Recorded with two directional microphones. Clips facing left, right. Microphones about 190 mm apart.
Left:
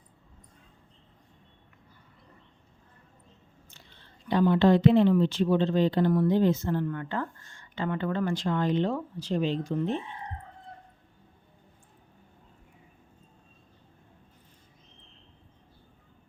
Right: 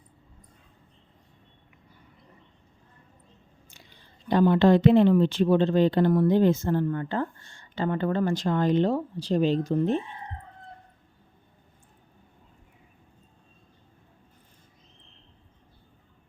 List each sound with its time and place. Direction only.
3.7 s a sound: 15° right (ahead or behind)
4.3 s speech: 45° right (ahead or behind)
6.8 s speech: 30° right (ahead or behind)